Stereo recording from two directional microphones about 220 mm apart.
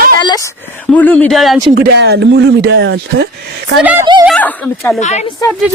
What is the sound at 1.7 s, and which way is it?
Speech, 45° right (ahead or behind).